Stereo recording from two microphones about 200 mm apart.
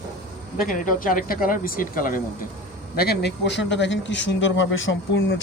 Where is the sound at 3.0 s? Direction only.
55° left (ahead or behind).